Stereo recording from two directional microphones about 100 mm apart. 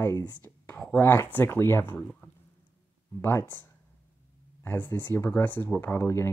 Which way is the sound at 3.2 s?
25° left (ahead or behind).